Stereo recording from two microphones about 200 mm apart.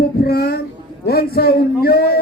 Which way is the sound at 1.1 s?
50° left (ahead or behind).